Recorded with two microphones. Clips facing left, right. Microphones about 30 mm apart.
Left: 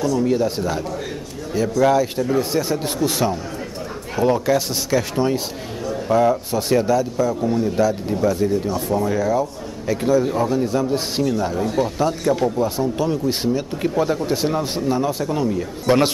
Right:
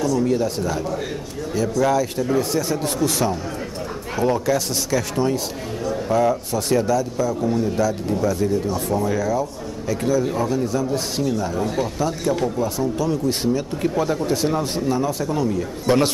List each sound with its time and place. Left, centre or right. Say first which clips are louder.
0.0 s speech: left 1 dB; centre
5.9 s a sound: left 2 dB; centre
6.5 s speech: left 2 dB; centre
8.6 s speech: left 1 dB; centre; by 11.2 s left
11.5 s speech: left 2 dB; centre
12.0 s speech: left 2 dB; centre
12.5 s speech: left 2 dB; left